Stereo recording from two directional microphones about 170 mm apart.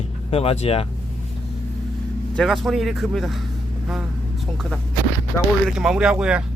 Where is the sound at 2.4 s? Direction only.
Centre (ahead or behind).